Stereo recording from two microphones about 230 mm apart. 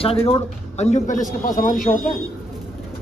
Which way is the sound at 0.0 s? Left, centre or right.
Left.